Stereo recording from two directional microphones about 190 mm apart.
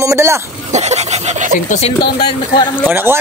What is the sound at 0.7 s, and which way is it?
Speech, 35° right (ahead or behind).